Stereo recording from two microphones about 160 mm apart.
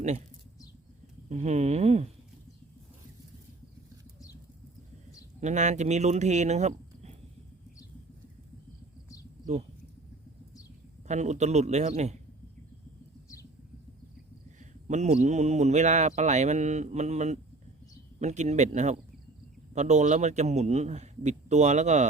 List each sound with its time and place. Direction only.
1.3 s speech: 45° right (ahead or behind)
5.4 s speech: 45° right (ahead or behind)
11.1 s speech: 45° right (ahead or behind)
14.6 s speech: 50° right (ahead or behind)